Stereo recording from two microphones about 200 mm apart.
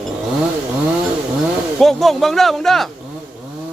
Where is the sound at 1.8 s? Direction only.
Centre (ahead or behind).